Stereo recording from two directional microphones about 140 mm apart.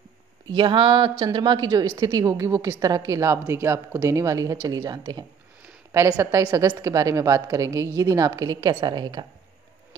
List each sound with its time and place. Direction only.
0.5 s a woman's voice: 35° right (ahead or behind)